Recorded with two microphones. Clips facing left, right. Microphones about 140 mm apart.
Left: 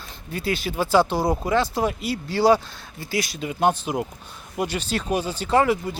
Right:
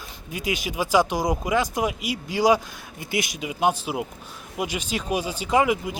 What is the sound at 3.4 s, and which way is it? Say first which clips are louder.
Speech: left 2 dB; 10° right (ahead or behind).